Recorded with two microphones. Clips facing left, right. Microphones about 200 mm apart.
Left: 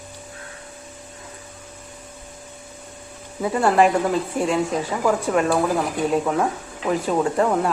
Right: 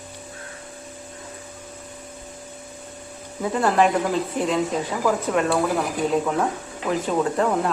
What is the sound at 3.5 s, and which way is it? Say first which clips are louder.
Speech: left 2 dB; 5° left (ahead or behind).